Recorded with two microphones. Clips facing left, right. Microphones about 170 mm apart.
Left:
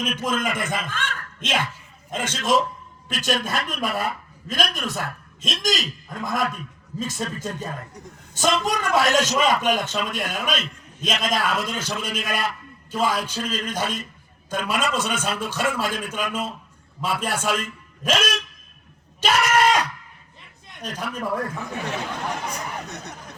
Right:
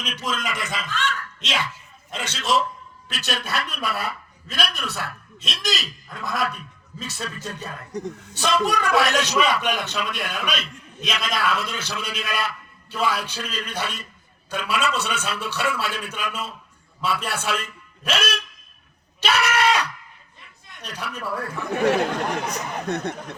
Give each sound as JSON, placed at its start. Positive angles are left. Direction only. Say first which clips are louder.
{"t": 0.0, "sound": "a man's voice", "louder": "left 4 dB", "side_deg": 50}
{"t": 21.6, "sound": "speech", "louder": "right 9 dB", "side_deg": -60}